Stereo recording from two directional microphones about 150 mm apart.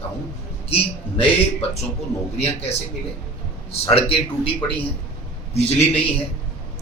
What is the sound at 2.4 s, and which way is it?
A man's voice, 40° left (ahead or behind).